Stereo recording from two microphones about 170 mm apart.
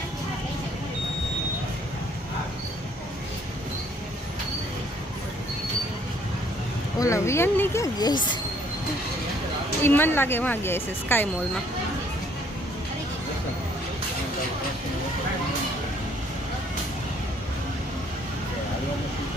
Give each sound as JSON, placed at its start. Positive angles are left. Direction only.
{"t": 7.0, "sound": "a woman's voice", "side_deg": 15}
{"t": 9.8, "sound": "a woman's voice", "side_deg": 15}